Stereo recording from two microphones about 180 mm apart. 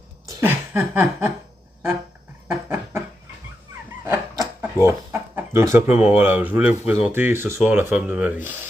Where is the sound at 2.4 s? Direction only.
15° right (ahead or behind).